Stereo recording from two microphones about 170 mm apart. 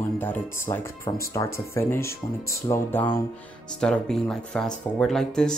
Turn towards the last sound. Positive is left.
turn(degrees=0)  # may be behind; listen again after turning